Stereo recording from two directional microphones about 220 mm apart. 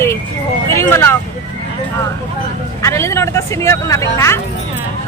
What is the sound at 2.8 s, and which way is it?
Speech, 15° left (ahead or behind).